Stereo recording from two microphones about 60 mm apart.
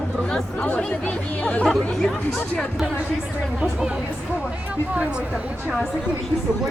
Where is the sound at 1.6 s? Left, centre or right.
Centre.